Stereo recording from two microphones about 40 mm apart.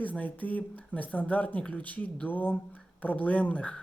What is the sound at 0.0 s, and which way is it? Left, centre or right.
Speech, left.